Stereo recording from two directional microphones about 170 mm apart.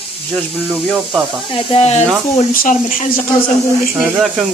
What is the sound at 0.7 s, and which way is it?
Speech, 10° right (ahead or behind).